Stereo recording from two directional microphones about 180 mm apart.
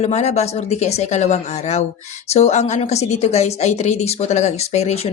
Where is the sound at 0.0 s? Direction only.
40° left (ahead or behind).